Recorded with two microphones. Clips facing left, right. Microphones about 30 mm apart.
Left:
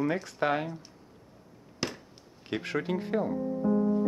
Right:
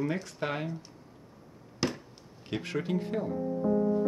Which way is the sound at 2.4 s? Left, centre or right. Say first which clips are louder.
Left 2 dB; centre.